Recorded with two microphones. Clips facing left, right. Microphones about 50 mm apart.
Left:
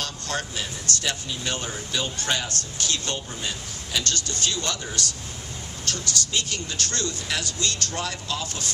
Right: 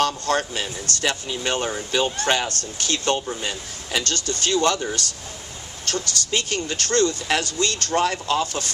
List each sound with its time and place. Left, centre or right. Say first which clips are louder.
0.0 s speech: right 9 dB; right